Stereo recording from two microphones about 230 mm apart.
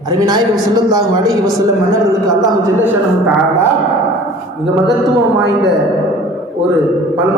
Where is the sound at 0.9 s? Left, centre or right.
Centre.